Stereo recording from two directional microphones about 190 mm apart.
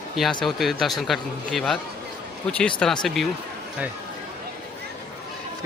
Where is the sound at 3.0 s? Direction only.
Centre (ahead or behind).